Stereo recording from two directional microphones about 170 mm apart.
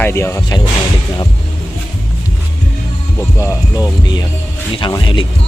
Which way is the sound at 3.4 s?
15° left (ahead or behind).